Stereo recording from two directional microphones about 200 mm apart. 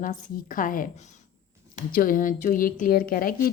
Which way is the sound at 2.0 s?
45° left (ahead or behind).